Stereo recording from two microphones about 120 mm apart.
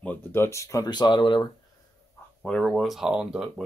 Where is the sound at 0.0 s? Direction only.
15° left (ahead or behind); by 1.5 s 40° left (ahead or behind).